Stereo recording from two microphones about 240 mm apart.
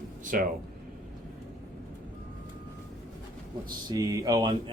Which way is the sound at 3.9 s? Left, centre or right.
Centre.